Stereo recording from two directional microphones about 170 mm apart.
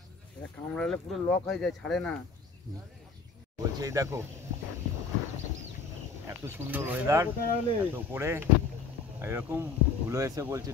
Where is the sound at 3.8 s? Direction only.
20° right (ahead or behind).